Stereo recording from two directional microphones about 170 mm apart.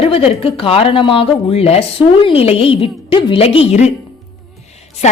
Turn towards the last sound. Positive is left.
turn(degrees=40)  # may be behind; listen again after turning